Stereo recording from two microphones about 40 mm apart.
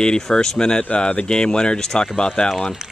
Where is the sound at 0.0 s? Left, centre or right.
Left.